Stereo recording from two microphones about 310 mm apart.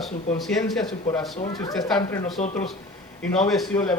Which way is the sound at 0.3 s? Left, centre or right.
Centre.